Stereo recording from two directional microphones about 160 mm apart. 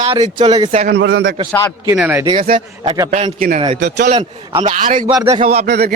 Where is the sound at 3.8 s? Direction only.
90° right.